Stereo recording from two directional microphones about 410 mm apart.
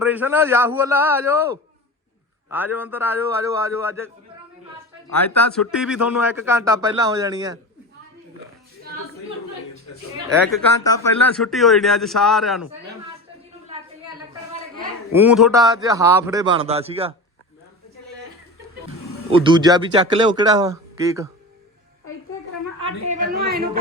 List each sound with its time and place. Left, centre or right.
0.0 s a man's voice: centre
5.7 s a man's voice: centre
10.2 s a man's voice: centre
10.8 s a man's voice: centre
15.1 s a man's voice: centre
19.3 s a man's voice: centre
22.8 s a woman's voice: centre